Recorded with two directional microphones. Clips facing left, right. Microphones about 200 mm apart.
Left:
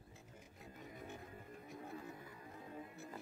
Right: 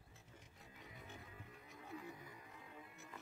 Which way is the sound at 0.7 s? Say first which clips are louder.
Left 6 dB; 45° left (ahead or behind).